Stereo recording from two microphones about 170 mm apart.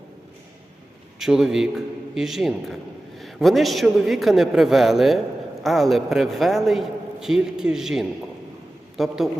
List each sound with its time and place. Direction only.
1.2 s a man's voice: 5° right (ahead or behind)